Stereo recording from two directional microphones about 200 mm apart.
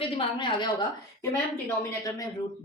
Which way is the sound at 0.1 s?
25° left (ahead or behind).